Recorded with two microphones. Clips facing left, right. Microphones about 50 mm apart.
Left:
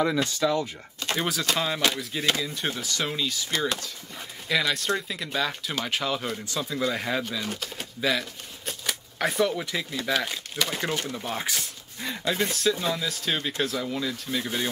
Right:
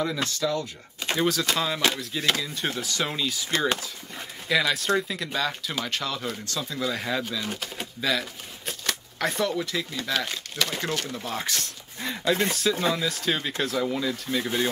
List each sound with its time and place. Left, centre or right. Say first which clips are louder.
0.0 s speech: left 3 dB; centre
1.0 s a sound: right 1 dB; centre
1.8 s speech: even; centre
3.5 s speech: right 3 dB; right
4.5 s speech: right 2 dB; centre
5.9 s speech: left 4 dB; centre
7.4 s speech: right 1 dB; centre
8.0 s shuffling cards: left 1 dB; centre
9.6 s speech: right 1 dB; centre